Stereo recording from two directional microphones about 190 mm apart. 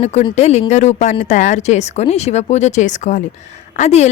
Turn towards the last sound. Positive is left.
turn(degrees=35)  # may be behind; listen again after turning